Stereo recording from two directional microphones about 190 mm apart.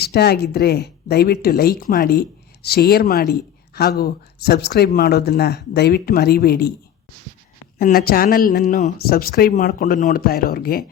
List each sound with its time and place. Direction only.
0.0 s speech: 60° left (ahead or behind)
7.8 s speech: 50° left (ahead or behind)